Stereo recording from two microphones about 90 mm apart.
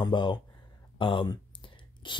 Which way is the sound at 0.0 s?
60° left (ahead or behind).